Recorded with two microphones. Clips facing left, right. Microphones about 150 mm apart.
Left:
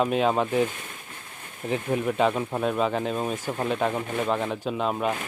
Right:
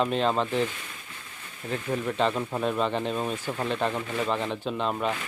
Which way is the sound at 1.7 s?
15° left (ahead or behind).